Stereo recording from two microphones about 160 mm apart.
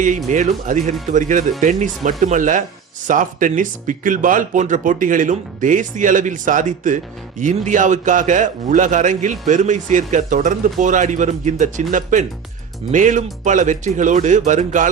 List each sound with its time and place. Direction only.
0.3 s speech: 50° right (ahead or behind)